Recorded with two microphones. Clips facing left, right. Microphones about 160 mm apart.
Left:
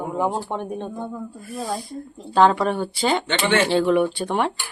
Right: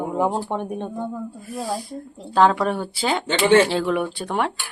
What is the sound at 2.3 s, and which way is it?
Speech, centre (ahead or behind).